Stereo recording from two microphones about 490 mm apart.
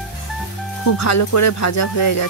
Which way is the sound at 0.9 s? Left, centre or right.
Left.